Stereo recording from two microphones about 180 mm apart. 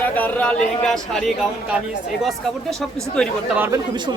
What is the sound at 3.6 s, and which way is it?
Speech, 15° right (ahead or behind).